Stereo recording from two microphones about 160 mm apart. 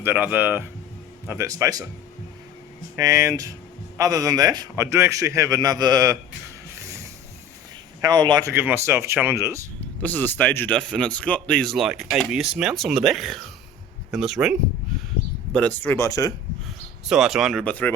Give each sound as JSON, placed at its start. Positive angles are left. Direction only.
{"t": 0.0, "sound": "a man's voice", "side_deg": -10}
{"t": 2.9, "sound": "a man's voice", "side_deg": -20}
{"t": 8.0, "sound": "a man's voice", "side_deg": -25}
{"t": 8.5, "sound": "speech", "side_deg": -15}
{"t": 10.0, "sound": "speech", "side_deg": 10}
{"t": 15.5, "sound": "speech", "side_deg": 10}
{"t": 16.6, "sound": "speech", "side_deg": -5}